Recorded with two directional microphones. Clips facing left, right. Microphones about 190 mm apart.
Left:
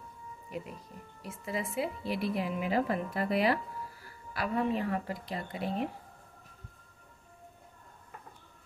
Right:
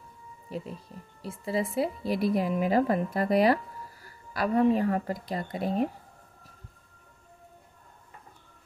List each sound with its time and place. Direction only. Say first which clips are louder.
0.5 s a woman's voice: right 4 dB; 30° right (ahead or behind)